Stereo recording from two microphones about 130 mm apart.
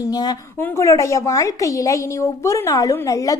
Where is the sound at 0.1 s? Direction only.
30° left (ahead or behind).